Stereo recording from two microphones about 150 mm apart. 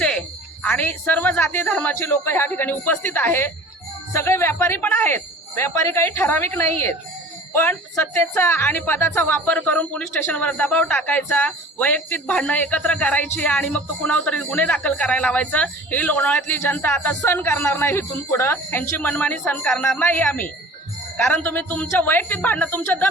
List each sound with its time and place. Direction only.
0.0 s music: 5° left (ahead or behind)
1.6 s a woman's voice: 10° left (ahead or behind)